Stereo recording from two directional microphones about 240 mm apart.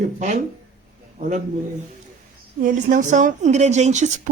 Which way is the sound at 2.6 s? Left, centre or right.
Right.